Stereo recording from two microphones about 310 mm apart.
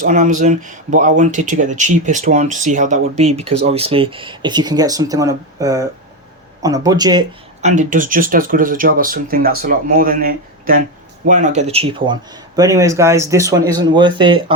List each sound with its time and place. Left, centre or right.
0.0 s speech: right